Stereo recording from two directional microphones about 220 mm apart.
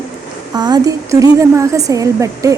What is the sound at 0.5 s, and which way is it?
A woman's voice, 20° right (ahead or behind).